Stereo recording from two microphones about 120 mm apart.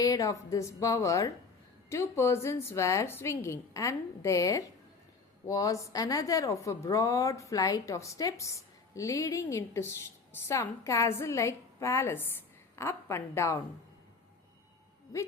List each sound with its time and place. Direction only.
0.0 s a woman's voice: 30° left (ahead or behind)